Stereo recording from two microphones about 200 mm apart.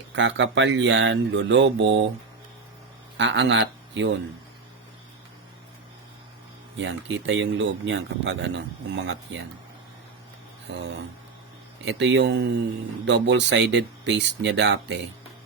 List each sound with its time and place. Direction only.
0.1 s speech: 65° right (ahead or behind)
3.2 s a man's voice: 65° right (ahead or behind)
6.7 s speech: 65° right (ahead or behind)
10.7 s speech: 60° right (ahead or behind)
11.9 s speech: 65° right (ahead or behind)